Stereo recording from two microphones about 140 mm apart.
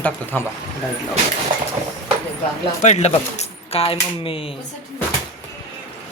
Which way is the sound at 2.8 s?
55° left (ahead or behind).